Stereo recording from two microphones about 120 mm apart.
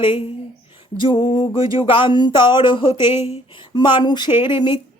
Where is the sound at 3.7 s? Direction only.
40° left (ahead or behind).